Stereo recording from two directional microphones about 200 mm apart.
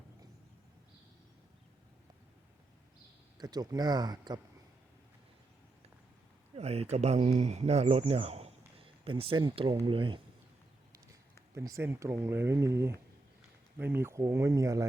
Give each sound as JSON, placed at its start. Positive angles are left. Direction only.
{"t": 3.3, "sound": "speech", "side_deg": -20}
{"t": 6.6, "sound": "speech", "side_deg": -30}